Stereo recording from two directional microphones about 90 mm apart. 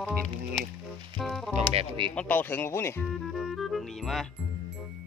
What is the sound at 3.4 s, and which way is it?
Speech, centre (ahead or behind).